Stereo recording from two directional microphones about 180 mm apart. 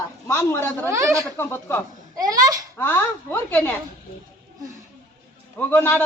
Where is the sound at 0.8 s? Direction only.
15° right (ahead or behind).